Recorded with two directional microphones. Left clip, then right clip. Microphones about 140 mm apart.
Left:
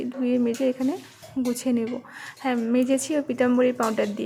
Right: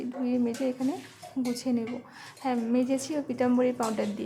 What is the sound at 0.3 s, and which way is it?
A woman's voice, 20° left (ahead or behind).